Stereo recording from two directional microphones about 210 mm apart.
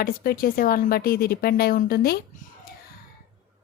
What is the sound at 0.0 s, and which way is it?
A woman's voice, 45° left (ahead or behind).